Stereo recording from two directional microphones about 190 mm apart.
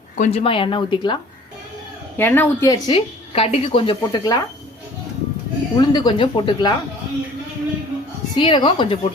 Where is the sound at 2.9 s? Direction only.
30° left (ahead or behind).